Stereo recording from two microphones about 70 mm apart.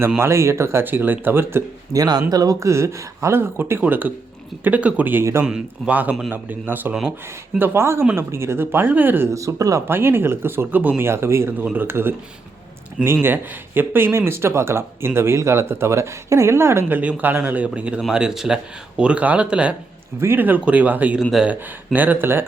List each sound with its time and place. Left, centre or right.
0.2 s speech: right
1.9 s speech: right
5.5 s speech: centre
5.9 s speech: right
9.3 s speech: right
9.8 s speech: right
11.6 s speech: right
13.2 s speech: right
17.0 s speech: right
20.1 s speech: right
21.4 s speech: centre
21.9 s speech: right